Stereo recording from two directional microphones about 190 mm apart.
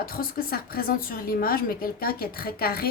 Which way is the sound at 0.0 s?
50° left (ahead or behind).